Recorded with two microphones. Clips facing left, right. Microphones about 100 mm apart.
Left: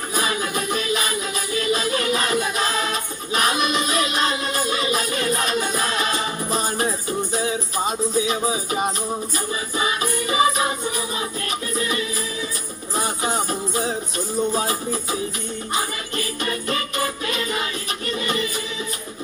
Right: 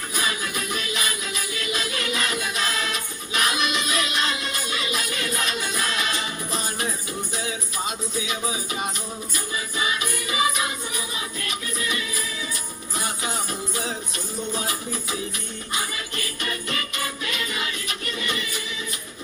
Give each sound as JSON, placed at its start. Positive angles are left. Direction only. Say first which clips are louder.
{"t": 0.1, "sound": "music", "louder": "left 5 dB", "side_deg": 35}
{"t": 15.7, "sound": "jingle bell", "louder": "left 4 dB", "side_deg": 35}